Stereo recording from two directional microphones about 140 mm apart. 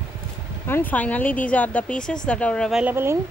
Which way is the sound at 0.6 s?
15° left (ahead or behind).